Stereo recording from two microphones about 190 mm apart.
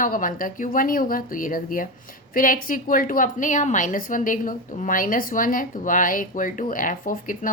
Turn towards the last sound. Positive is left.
turn(degrees=45)  # may be behind; listen again after turning